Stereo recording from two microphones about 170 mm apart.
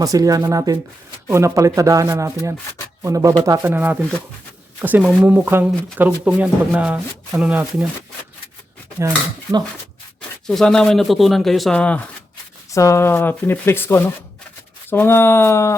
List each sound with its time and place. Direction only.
0.0 s speech: 20° right (ahead or behind)
3.7 s speech: 10° right (ahead or behind)
9.0 s speech: 20° right (ahead or behind)
10.4 s speech: 5° left (ahead or behind)
12.7 s speech: 20° left (ahead or behind)